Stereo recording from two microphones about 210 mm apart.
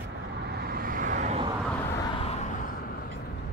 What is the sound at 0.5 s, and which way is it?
Vehicle, 45° right (ahead or behind).